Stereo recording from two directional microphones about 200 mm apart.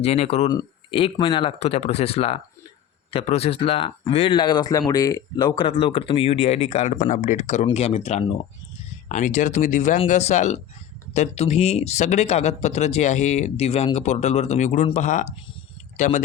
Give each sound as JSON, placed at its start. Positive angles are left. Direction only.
{"t": 0.0, "sound": "speech", "side_deg": 30}
{"t": 9.0, "sound": "speech", "side_deg": 40}